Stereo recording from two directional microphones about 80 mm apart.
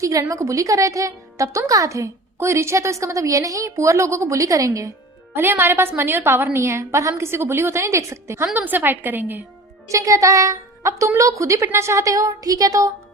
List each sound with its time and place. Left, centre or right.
0.0 s a woman's voice: right
5.3 s a woman's voice: right
8.5 s a woman's voice: right
9.9 s a woman's voice: right